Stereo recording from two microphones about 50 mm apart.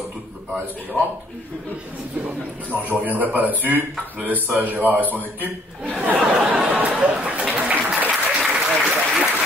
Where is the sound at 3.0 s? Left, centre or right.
Right.